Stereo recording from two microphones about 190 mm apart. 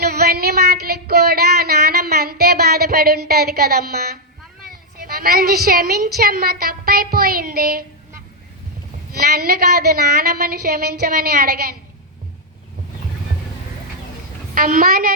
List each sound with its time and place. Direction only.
0.0 s a sound: 55° right (ahead or behind)
4.7 s a woman's voice: 50° right (ahead or behind)
9.1 s a woman's voice: 55° right (ahead or behind)
14.5 s a woman's voice: 45° right (ahead or behind)